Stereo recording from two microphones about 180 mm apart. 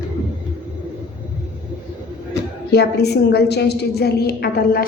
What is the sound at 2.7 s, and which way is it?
A woman's voice, 65° left (ahead or behind).